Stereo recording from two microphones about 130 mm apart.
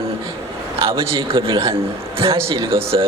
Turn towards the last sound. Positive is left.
turn(degrees=-45)  # may be behind; listen again after turning